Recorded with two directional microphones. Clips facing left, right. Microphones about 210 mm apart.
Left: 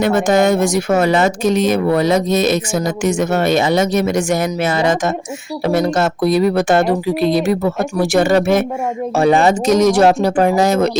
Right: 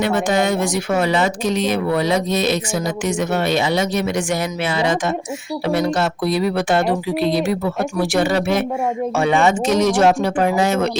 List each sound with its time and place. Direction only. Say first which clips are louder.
0.0 s speech: left 5 dB; 45° left (ahead or behind)
9.1 s speech: left 5 dB; 35° left (ahead or behind)